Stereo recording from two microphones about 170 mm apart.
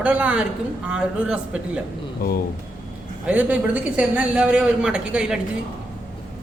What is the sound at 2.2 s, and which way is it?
Speech, 60° left (ahead or behind).